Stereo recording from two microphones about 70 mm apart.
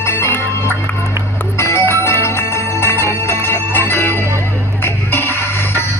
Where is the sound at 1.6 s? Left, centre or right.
Left.